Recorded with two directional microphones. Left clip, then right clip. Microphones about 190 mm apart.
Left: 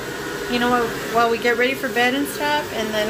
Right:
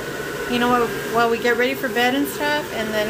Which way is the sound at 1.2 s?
5° right (ahead or behind).